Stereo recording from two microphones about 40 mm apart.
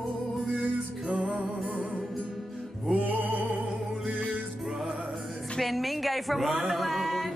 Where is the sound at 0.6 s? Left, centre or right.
Right.